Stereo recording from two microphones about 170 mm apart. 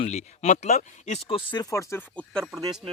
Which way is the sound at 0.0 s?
40° left (ahead or behind).